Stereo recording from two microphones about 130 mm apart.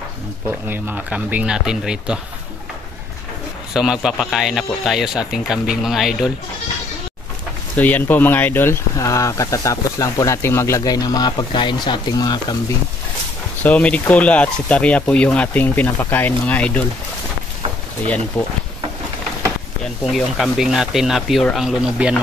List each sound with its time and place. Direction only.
0.5 s speech: 15° right (ahead or behind)
3.7 s speech: 5° right (ahead or behind)
7.7 s speech: 15° left (ahead or behind); by 12.5 s 30° left (ahead or behind)
13.6 s speech: 10° left (ahead or behind)
18.0 s speech: 10° left (ahead or behind)
20.1 s speech: centre (ahead or behind)